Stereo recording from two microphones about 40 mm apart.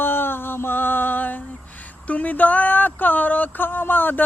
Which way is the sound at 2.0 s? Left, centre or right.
Left.